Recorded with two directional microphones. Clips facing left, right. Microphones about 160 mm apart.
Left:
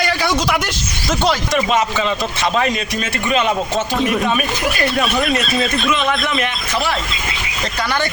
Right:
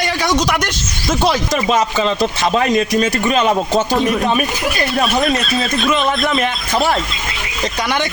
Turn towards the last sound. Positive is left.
turn(degrees=-40)  # may be behind; listen again after turning